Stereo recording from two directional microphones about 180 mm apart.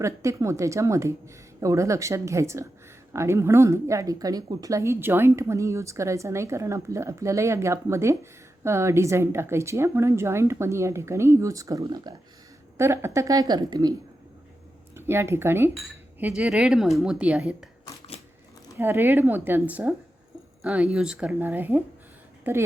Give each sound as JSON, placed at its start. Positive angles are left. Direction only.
{"t": 0.0, "sound": "a woman's voice", "side_deg": -15}
{"t": 14.9, "sound": "a woman's voice", "side_deg": -15}
{"t": 18.7, "sound": "speech", "side_deg": -15}